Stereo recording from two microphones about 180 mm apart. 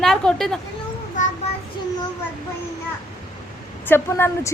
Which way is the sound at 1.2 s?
45° left (ahead or behind).